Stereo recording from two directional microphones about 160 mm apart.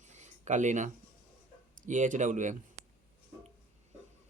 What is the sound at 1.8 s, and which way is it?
Speech, 50° right (ahead or behind).